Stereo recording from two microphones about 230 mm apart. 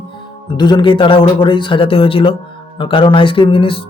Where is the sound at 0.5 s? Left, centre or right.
Centre.